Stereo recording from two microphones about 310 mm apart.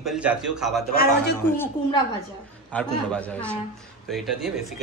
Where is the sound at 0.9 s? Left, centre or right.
Left.